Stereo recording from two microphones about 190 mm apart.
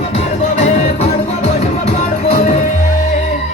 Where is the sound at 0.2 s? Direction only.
40° left (ahead or behind).